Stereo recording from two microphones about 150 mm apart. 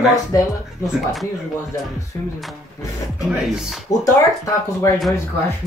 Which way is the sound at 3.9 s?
25° left (ahead or behind).